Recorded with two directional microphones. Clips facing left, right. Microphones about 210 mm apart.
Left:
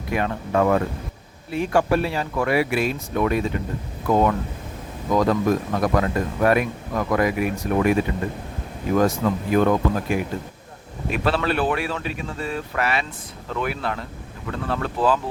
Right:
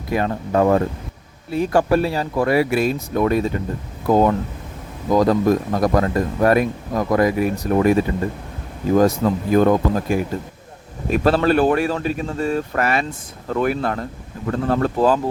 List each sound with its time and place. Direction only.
0.1 s speech: 35° right (ahead or behind)